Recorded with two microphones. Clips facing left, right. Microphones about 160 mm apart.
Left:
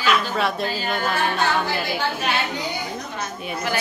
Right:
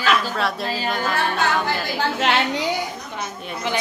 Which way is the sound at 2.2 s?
90° right.